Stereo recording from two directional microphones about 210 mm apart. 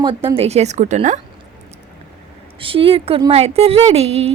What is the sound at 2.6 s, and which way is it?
A woman's voice, 25° right (ahead or behind).